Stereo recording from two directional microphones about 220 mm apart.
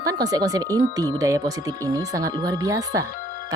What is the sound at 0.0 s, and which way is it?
Speech, 15° right (ahead or behind).